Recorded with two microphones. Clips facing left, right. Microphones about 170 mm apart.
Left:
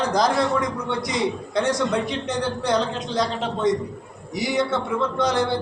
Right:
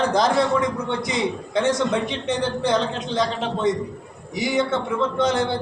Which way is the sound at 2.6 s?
Centre (ahead or behind).